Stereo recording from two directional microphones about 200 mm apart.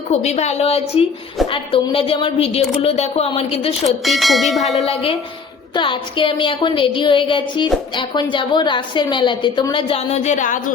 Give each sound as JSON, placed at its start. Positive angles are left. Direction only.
{"t": 0.1, "sound": "a woman's voice", "side_deg": 35}
{"t": 3.8, "sound": "bell", "side_deg": 0}
{"t": 5.7, "sound": "a woman's voice", "side_deg": 25}